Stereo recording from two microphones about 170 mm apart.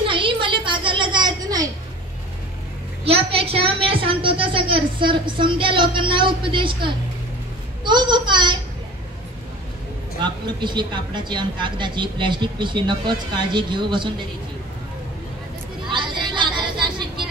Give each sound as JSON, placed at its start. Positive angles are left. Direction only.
{"t": 0.1, "sound": "a sound", "side_deg": -30}
{"t": 3.1, "sound": "a woman's voice", "side_deg": -35}
{"t": 10.2, "sound": "speech", "side_deg": -25}
{"t": 15.9, "sound": "music", "side_deg": -30}